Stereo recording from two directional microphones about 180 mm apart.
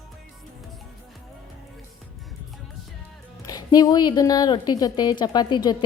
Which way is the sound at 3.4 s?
20° left (ahead or behind).